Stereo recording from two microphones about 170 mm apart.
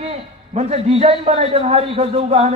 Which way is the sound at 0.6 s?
35° right (ahead or behind).